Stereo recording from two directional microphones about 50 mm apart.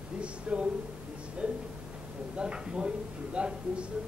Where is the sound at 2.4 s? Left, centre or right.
Centre.